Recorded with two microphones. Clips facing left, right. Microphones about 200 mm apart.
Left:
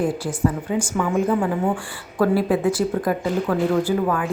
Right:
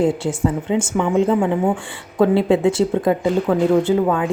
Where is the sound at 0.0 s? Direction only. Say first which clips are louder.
Right 3 dB; 25° right (ahead or behind).